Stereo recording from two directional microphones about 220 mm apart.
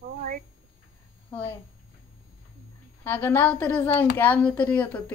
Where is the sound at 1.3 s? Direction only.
5° left (ahead or behind).